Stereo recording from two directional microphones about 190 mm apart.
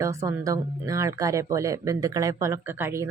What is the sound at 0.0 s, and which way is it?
Speech, 15° right (ahead or behind).